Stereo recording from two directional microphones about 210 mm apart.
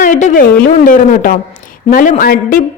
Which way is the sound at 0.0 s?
40° left (ahead or behind).